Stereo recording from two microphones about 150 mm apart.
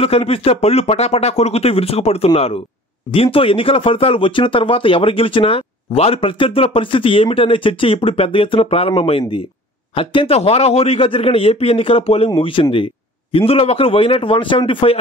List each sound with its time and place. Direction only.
0.0 s speech: 40° left (ahead or behind)